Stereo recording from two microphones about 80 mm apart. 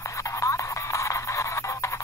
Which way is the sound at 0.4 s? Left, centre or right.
Left.